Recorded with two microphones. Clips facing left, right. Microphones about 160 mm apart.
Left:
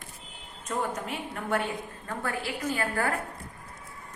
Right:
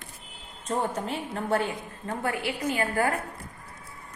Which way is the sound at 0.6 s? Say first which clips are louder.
Right 3 dB; 30° right (ahead or behind).